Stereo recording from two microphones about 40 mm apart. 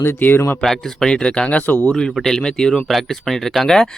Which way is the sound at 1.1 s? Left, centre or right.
Left.